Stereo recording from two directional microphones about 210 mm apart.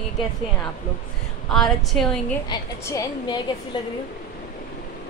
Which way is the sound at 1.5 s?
Centre (ahead or behind).